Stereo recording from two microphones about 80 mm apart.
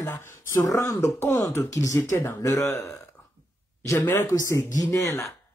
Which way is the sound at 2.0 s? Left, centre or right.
Left.